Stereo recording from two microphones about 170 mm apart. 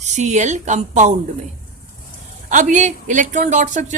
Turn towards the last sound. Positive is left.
turn(degrees=-45)  # may be behind; listen again after turning